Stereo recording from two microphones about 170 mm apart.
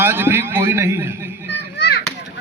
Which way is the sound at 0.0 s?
15° right (ahead or behind).